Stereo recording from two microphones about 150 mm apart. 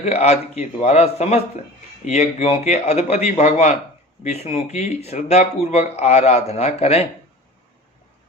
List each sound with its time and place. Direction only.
0.0 s speech: 45° left (ahead or behind)